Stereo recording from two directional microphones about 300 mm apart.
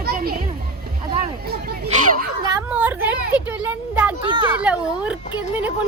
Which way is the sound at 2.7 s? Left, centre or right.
Centre.